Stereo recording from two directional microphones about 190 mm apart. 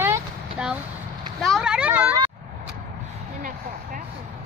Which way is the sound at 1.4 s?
Centre (ahead or behind).